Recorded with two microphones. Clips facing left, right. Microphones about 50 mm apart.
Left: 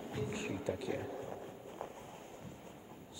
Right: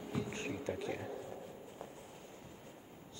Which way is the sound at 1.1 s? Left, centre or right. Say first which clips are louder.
Left 2 dB; left.